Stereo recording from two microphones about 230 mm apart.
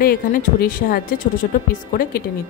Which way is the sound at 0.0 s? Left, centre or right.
Left.